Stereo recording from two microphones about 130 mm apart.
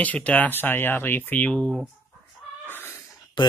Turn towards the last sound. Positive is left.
turn(degrees=35)  # may be behind; listen again after turning